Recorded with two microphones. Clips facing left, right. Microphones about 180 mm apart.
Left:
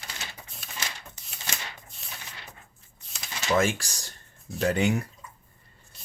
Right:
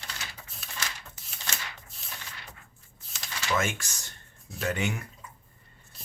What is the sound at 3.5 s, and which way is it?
Speech, 35° left (ahead or behind).